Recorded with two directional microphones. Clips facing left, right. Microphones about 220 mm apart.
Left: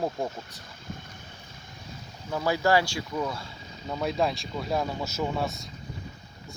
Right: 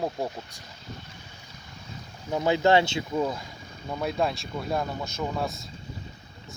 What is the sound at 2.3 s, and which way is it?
Speech, 20° right (ahead or behind).